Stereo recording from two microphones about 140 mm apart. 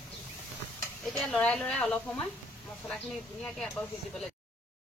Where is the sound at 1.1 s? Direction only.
5° left (ahead or behind).